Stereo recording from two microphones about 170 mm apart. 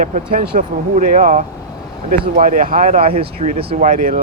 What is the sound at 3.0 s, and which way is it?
Speech, 35° right (ahead or behind).